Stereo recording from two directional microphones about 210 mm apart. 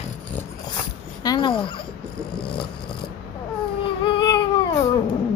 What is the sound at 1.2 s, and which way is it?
Speech, 20° left (ahead or behind).